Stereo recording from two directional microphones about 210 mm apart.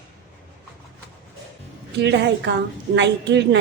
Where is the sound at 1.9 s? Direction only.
55° right (ahead or behind).